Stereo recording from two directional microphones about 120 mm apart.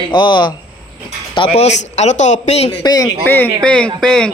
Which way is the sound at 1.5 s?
65° left (ahead or behind).